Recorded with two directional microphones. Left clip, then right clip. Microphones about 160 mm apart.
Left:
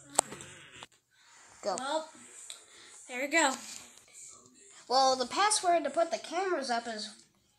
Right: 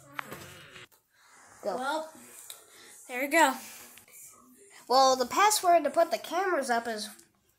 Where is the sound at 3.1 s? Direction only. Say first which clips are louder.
Right 4 dB; 10° right (ahead or behind).